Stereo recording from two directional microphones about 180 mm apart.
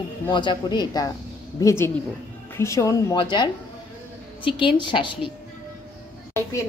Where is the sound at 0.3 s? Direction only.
25° left (ahead or behind).